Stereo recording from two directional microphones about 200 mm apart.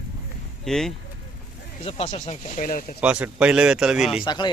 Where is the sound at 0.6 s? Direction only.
Centre (ahead or behind).